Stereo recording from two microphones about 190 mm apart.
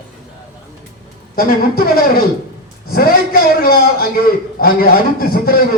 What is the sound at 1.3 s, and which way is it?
A man's voice, 50° left (ahead or behind).